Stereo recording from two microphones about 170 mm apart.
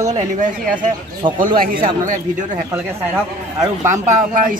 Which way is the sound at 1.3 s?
55° right (ahead or behind).